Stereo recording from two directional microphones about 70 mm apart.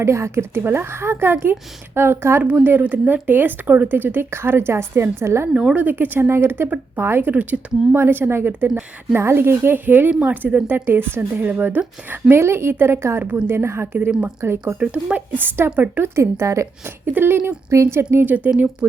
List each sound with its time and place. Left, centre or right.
0.0 s speech: right
2.4 s a woman's voice: right
5.5 s a woman's voice: centre
12.3 s speech: right
14.1 s speech: centre; by 16.6 s right
16.8 s speech: right
18.3 s a woman's voice: right
18.8 s speech: right